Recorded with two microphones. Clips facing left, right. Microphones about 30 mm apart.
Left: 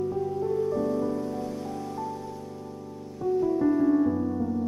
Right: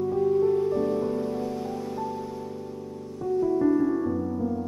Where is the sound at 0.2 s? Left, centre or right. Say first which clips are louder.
Right 8 dB; right.